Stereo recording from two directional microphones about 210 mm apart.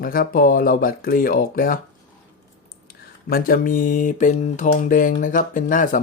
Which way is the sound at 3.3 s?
45° left (ahead or behind).